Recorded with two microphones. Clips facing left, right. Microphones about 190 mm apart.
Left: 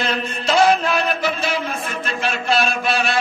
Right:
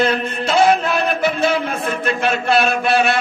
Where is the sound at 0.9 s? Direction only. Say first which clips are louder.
Right 3 dB; 55° right (ahead or behind).